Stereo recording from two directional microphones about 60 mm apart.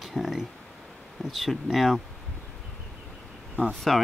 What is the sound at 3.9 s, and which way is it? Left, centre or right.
Speech, centre.